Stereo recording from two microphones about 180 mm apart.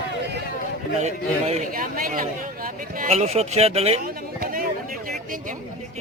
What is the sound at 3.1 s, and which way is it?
Speech, 35° right (ahead or behind).